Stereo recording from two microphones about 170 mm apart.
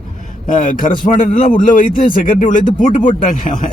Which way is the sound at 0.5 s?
50° left (ahead or behind).